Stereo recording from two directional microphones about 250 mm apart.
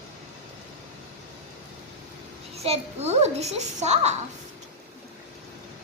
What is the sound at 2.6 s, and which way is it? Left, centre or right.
A child's voice, right.